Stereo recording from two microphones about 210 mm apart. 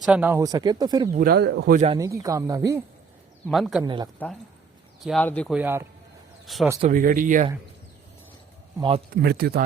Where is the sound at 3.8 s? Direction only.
20° right (ahead or behind).